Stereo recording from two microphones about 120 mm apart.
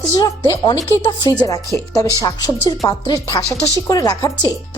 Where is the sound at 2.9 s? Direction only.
30° left (ahead or behind).